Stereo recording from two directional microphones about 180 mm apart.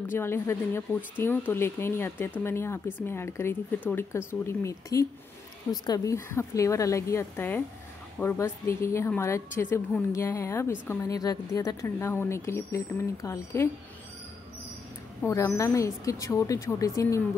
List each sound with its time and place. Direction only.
0.0 s a woman's voice: 15° left (ahead or behind)
15.2 s a woman's voice: 15° left (ahead or behind)